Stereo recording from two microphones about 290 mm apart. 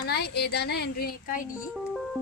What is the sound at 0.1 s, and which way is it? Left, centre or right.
Speech, left.